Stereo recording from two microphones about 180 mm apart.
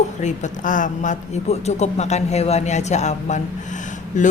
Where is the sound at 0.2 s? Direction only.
40° left (ahead or behind).